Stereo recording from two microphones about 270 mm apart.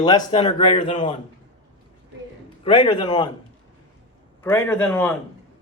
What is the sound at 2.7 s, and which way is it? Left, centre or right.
Speech, centre.